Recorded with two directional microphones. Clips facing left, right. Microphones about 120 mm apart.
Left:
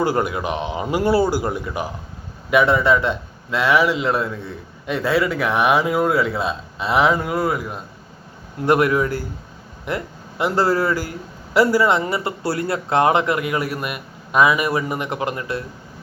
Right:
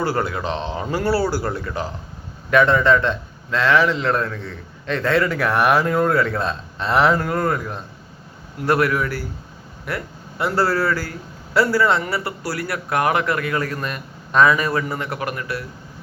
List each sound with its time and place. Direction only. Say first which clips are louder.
0.0 s a man's voice: left 2 dB; 15° left (ahead or behind)
8.5 s a man's voice: left 2 dB; 20° left (ahead or behind)